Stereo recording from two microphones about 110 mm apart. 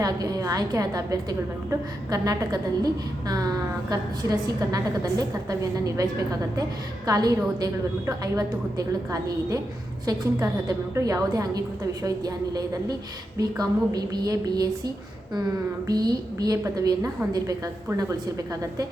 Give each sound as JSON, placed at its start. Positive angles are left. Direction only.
{"t": 0.0, "sound": "a woman's voice", "side_deg": -35}
{"t": 15.9, "sound": "a woman's voice", "side_deg": -35}